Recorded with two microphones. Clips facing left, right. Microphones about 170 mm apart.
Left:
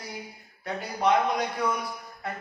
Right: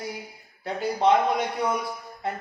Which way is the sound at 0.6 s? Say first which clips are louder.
Right 4 dB; 25° right (ahead or behind).